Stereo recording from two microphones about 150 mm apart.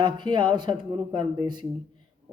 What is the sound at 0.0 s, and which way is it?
Speech, 30° right (ahead or behind).